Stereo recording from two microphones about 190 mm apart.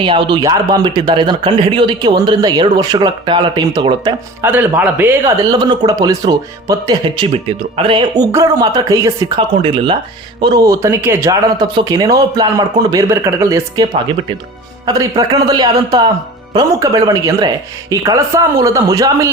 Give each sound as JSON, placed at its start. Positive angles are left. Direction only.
{"t": 0.0, "sound": "speech", "side_deg": -25}
{"t": 4.4, "sound": "speech", "side_deg": -10}
{"t": 9.6, "sound": "speech", "side_deg": -30}
{"t": 14.8, "sound": "speech", "side_deg": -20}